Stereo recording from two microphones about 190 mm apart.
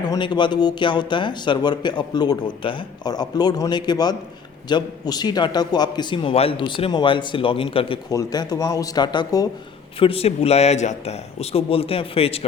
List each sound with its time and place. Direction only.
0.0 s a man's voice: 25° left (ahead or behind)